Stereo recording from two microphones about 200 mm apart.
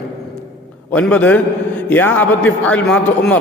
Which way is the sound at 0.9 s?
5° left (ahead or behind).